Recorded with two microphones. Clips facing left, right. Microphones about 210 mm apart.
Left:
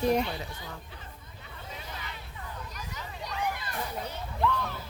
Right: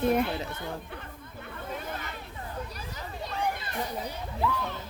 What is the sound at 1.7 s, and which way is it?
Hubbub, 55° right (ahead or behind).